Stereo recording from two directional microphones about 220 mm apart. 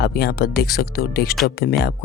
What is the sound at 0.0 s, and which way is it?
Speech, 45° left (ahead or behind).